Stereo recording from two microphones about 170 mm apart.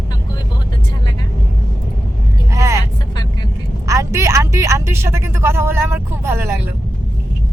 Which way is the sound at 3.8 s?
20° right (ahead or behind).